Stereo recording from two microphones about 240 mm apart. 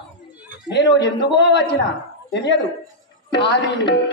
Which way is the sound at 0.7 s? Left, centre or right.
Left.